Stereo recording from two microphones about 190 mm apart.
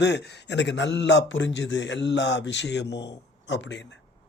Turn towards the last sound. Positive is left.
turn(degrees=70)  # may be behind; listen again after turning